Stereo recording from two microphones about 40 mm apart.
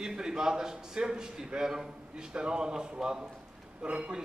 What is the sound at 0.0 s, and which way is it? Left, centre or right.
A man's voice, centre.